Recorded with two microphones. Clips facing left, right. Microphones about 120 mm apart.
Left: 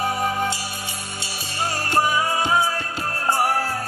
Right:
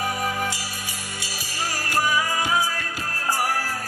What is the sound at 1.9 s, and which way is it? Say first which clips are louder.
Music: left 3 dB; 25° left (ahead or behind).